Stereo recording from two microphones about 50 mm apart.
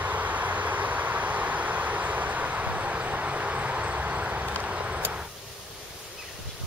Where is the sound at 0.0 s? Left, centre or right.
Right.